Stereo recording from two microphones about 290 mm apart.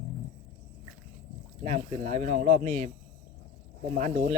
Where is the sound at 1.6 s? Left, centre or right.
Right.